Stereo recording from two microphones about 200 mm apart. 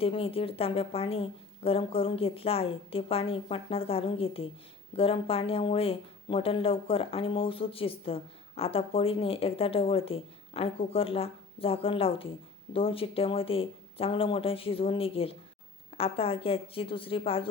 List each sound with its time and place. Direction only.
0.0 s speech: 30° left (ahead or behind)